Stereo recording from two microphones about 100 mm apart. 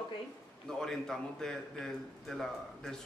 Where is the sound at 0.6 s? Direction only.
5° left (ahead or behind).